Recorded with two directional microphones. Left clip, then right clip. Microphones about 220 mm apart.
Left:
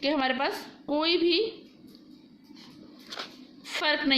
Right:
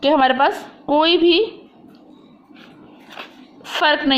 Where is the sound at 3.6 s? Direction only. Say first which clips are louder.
Right 10 dB; 20° right (ahead or behind).